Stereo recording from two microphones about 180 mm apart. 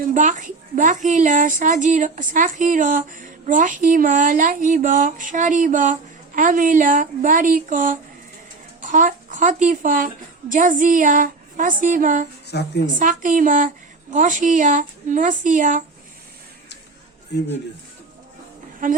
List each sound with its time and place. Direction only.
0.1 s a woman's voice: 45° right (ahead or behind)
12.5 s a woman's voice: 70° left (ahead or behind)
13.0 s a woman's voice: 45° right (ahead or behind)
17.3 s a woman's voice: 70° left (ahead or behind)